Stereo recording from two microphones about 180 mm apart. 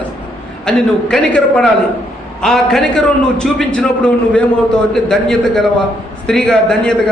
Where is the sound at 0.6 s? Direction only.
5° left (ahead or behind).